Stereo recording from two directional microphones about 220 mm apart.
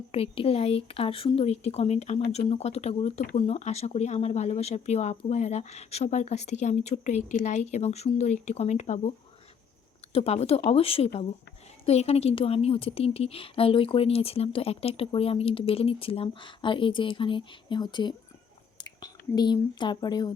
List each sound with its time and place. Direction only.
0.1 s a woman's voice: 25° left (ahead or behind)
19.0 s a woman's voice: 20° left (ahead or behind)